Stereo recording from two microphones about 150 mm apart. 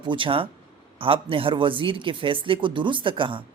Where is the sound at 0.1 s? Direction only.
35° right (ahead or behind).